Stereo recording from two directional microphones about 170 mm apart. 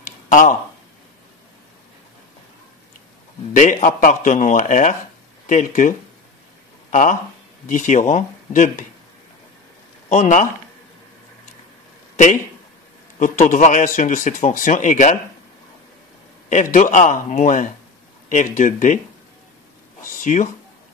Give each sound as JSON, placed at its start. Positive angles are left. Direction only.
{"t": 0.0, "sound": "a sound", "side_deg": 50}
{"t": 3.5, "sound": "speech", "side_deg": 50}
{"t": 10.0, "sound": "speech", "side_deg": 45}
{"t": 13.2, "sound": "speech", "side_deg": 50}
{"t": 16.4, "sound": "speech", "side_deg": 50}
{"t": 20.2, "sound": "cat", "side_deg": 45}